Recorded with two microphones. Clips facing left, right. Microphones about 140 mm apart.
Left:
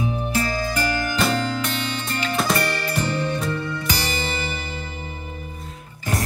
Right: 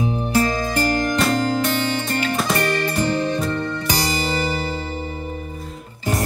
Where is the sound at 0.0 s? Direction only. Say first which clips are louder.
Right 4 dB; 35° right (ahead or behind).